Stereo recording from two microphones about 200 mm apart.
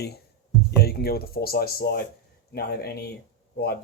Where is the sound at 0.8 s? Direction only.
50° left (ahead or behind).